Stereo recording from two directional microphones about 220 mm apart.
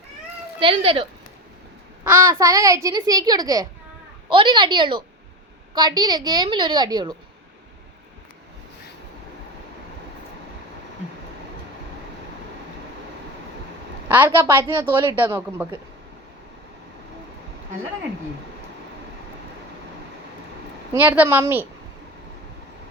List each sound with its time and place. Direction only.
0.6 s a woman's voice: 25° right (ahead or behind)
2.3 s a woman's voice: 15° right (ahead or behind)
14.1 s speech: 10° right (ahead or behind)
20.9 s speech: 10° right (ahead or behind)